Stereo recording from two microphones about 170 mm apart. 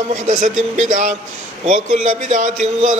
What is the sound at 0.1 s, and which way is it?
Speech, 50° right (ahead or behind).